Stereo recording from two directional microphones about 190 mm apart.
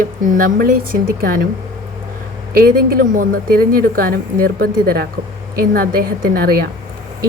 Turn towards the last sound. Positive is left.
turn(degrees=-50)  # may be behind; listen again after turning